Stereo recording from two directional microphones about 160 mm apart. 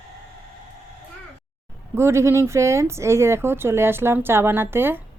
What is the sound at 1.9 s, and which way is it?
Speech, 15° right (ahead or behind).